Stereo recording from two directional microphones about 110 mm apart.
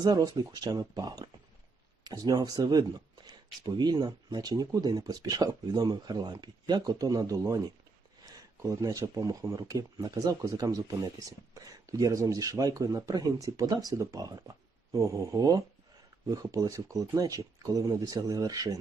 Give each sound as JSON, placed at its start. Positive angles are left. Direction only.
{"t": 0.0, "sound": "speech", "side_deg": -35}